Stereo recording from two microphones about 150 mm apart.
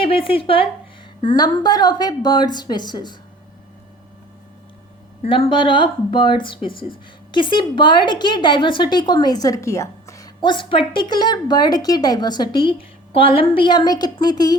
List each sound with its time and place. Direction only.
0.0 s a woman's voice: 35° left (ahead or behind)
5.2 s a woman's voice: 40° left (ahead or behind)